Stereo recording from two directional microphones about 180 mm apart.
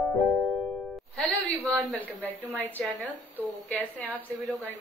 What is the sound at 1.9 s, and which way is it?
A woman's voice, 10° left (ahead or behind).